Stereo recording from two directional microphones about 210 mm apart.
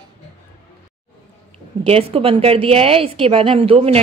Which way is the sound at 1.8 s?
30° right (ahead or behind).